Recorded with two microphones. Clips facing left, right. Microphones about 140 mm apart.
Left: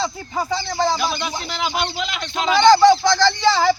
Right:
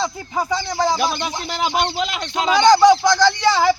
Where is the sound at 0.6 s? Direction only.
5° right (ahead or behind).